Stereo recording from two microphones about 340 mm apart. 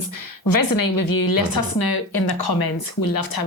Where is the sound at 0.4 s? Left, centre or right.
Left.